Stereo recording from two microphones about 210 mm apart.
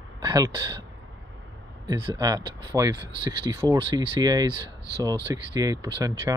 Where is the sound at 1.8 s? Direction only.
20° right (ahead or behind).